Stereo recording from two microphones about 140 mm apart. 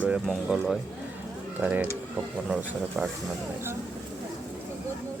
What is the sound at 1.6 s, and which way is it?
Speech, 10° right (ahead or behind).